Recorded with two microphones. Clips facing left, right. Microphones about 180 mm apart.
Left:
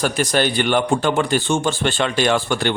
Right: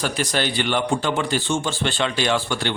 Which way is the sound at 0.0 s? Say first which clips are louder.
Left 5 dB; 45° left (ahead or behind).